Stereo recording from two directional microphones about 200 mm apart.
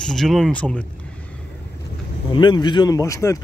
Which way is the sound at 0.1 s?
Centre (ahead or behind).